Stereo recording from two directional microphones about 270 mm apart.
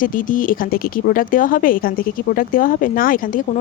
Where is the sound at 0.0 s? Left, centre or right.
Left.